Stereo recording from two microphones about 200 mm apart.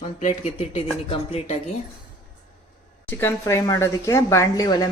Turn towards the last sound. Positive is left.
turn(degrees=20)  # may be behind; listen again after turning